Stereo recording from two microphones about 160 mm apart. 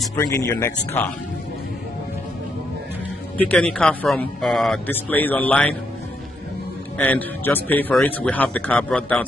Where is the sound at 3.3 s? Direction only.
10° left (ahead or behind).